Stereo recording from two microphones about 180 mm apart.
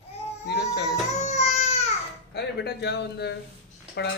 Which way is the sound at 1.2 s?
40° left (ahead or behind).